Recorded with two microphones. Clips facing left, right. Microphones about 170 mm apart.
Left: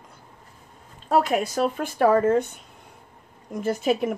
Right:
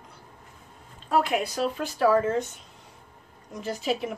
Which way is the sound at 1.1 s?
45° left (ahead or behind).